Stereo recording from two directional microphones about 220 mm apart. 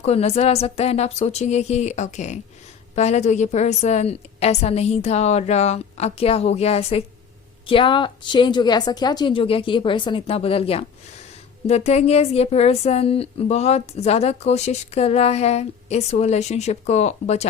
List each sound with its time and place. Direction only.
0.0 s a woman's voice: 30° left (ahead or behind)